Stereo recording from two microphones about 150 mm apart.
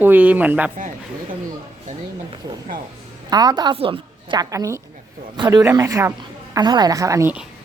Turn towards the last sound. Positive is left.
turn(degrees=-20)  # may be behind; listen again after turning